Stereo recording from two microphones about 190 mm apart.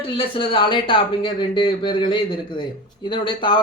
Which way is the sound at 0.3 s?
25° left (ahead or behind).